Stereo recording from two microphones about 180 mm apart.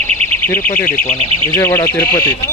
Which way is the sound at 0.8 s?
50° left (ahead or behind).